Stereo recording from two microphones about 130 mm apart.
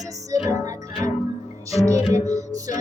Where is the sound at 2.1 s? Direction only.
25° right (ahead or behind).